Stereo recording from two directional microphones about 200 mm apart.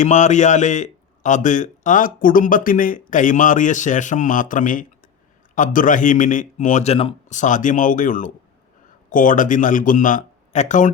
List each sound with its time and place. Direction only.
0.0 s a man's voice: 35° left (ahead or behind)